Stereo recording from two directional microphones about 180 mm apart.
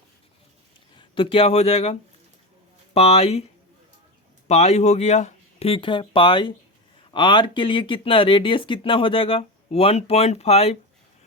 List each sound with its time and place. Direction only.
0.9 s speech: 30° left (ahead or behind)
4.4 s speech: 35° left (ahead or behind)